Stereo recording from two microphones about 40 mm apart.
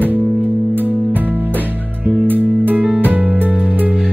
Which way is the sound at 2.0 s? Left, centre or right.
Right.